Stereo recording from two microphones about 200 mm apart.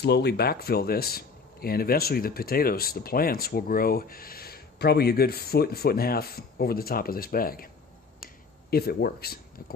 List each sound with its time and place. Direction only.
0.0 s speech: 55° left (ahead or behind)
8.7 s speech: 50° left (ahead or behind)